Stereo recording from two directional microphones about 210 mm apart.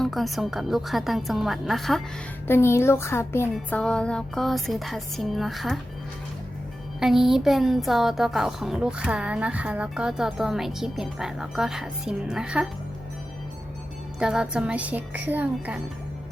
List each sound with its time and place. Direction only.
0.0 s a woman's voice: centre (ahead or behind)
2.5 s a child's voice: 10° left (ahead or behind)
7.0 s a woman's voice: centre (ahead or behind)
14.2 s speech: 5° right (ahead or behind)